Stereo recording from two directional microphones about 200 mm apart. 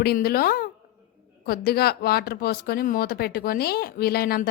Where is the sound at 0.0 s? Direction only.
50° left (ahead or behind).